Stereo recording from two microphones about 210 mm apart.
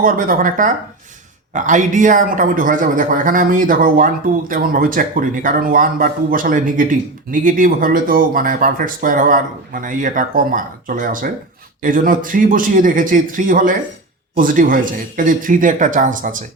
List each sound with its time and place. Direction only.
0.0 s speech: 40° right (ahead or behind)